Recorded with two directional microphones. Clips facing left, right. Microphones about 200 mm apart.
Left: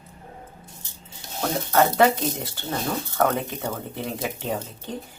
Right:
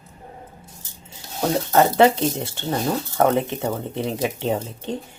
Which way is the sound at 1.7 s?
25° right (ahead or behind).